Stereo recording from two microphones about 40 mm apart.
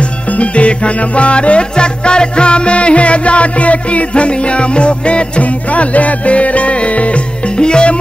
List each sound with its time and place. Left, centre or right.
0.4 s music: left